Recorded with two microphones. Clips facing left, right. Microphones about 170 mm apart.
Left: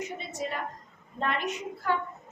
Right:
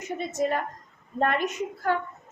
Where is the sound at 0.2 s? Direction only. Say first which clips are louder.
Right 7 dB; 45° right (ahead or behind).